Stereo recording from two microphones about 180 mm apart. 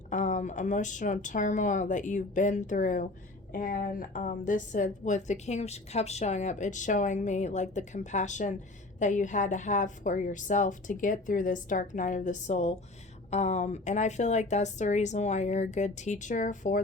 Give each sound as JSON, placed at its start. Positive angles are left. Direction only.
{"t": 0.1, "sound": "a woman's voice", "side_deg": 45}